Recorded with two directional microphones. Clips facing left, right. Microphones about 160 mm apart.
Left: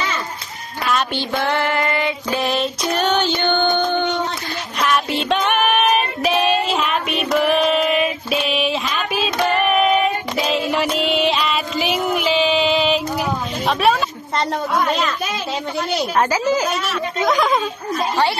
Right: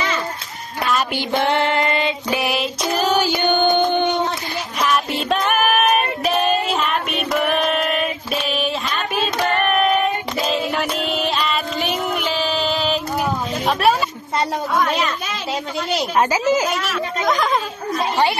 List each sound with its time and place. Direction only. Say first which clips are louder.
1.1 s child singing: right 2 dB; 20° right (ahead or behind)
2.9 s a sound: right 1 dB; 5° right (ahead or behind)
4.7 s child singing: left 1 dB; centre (ahead or behind)
16.2 s a woman's voice: right 1 dB; 20° right (ahead or behind)